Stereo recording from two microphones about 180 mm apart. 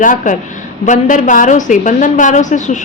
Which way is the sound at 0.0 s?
45° left (ahead or behind).